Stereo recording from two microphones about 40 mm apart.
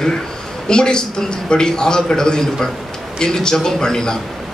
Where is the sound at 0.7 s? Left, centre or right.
Centre.